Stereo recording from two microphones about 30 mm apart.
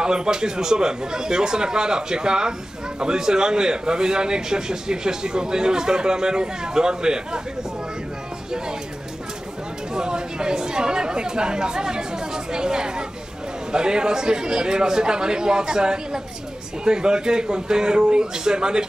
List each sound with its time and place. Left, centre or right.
0.0 s a man's voice: right
9.9 s a man's voice: right